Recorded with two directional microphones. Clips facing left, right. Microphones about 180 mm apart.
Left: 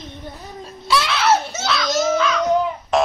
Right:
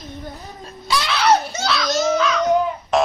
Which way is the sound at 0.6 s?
Centre (ahead or behind).